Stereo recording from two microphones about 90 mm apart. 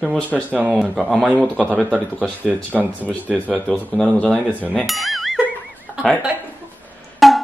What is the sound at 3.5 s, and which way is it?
Speech, 10° left (ahead or behind).